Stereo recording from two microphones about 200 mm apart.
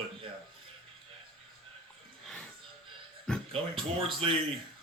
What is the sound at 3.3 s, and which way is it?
Speech, 5° left (ahead or behind).